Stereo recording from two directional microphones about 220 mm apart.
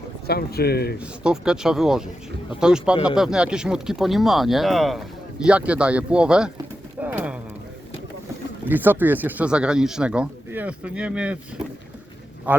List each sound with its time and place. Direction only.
0.3 s speech: 45° left (ahead or behind)
0.9 s speech: 5° right (ahead or behind)
7.0 s clip-clop: 5° right (ahead or behind)
8.6 s speech: 10° right (ahead or behind)
12.5 s speech: 5° right (ahead or behind)